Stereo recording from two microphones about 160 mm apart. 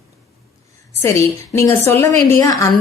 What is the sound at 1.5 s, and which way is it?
A woman's voice, 15° left (ahead or behind).